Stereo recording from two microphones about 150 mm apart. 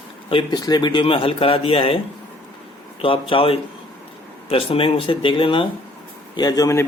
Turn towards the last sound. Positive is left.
turn(degrees=20)  # may be behind; listen again after turning